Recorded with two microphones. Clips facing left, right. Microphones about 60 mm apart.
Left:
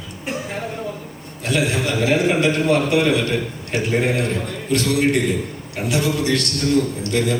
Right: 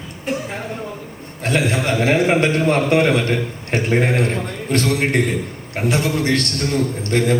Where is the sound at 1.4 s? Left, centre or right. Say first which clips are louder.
Right 2 dB; right.